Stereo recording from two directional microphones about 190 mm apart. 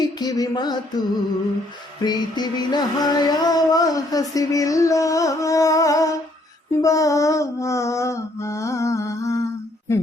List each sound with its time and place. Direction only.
0.0 s music: 20° left (ahead or behind)
2.0 s music: 20° left (ahead or behind)
9.9 s a sound: 15° left (ahead or behind)